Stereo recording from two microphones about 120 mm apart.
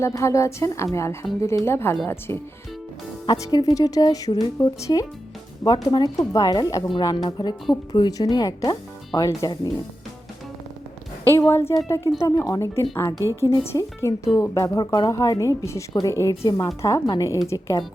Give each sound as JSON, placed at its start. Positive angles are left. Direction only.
{"t": 0.0, "sound": "speech", "side_deg": 25}
{"t": 11.3, "sound": "speech", "side_deg": 20}